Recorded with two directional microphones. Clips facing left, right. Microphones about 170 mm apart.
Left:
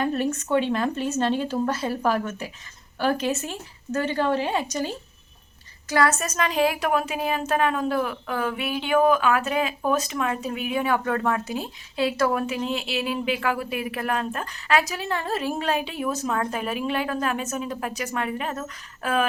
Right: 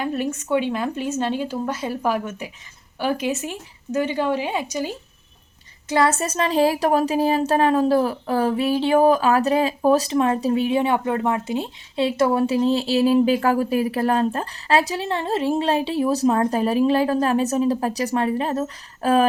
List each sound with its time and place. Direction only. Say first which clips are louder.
0.0 s a woman's voice: even; 10° right (ahead or behind)
5.9 s a woman's voice: right 3 dB; 25° right (ahead or behind)